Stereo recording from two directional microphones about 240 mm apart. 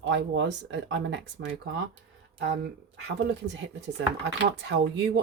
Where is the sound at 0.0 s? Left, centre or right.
Right.